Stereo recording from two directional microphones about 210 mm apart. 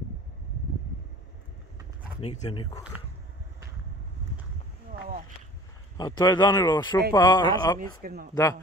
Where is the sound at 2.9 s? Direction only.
10° right (ahead or behind).